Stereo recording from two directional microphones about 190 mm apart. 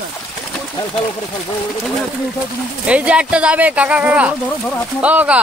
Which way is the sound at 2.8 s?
5° right (ahead or behind).